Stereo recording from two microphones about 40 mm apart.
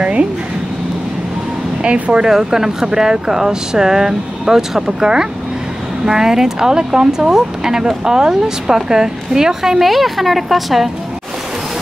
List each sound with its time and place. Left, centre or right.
0.0 s speech: right
1.8 s speech: right
2.2 s speech: centre